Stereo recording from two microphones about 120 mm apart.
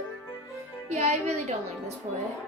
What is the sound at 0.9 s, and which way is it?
Speech, 65° right (ahead or behind).